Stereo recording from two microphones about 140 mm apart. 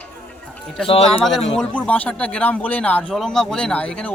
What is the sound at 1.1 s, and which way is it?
A man's voice, centre (ahead or behind).